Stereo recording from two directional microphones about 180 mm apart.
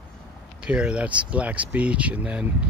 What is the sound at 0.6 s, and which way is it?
Speech, 5° right (ahead or behind).